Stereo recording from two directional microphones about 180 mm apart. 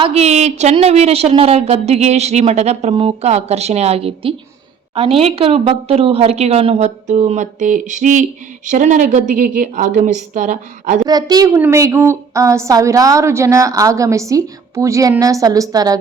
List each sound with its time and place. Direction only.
0.0 s a woman's voice: 35° right (ahead or behind)
11.0 s a woman's voice: 20° right (ahead or behind)